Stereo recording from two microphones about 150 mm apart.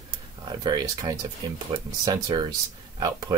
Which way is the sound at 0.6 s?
25° right (ahead or behind).